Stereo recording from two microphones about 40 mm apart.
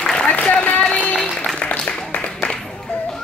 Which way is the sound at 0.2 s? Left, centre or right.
Left.